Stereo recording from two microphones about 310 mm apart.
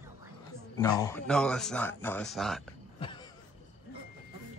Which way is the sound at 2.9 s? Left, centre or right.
Centre.